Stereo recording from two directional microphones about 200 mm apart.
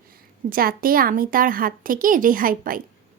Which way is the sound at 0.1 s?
45° right (ahead or behind).